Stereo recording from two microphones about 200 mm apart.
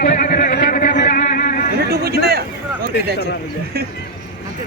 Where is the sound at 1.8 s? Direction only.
50° right (ahead or behind).